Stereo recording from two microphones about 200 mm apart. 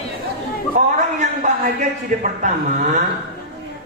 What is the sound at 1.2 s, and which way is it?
A woman's voice, 40° right (ahead or behind).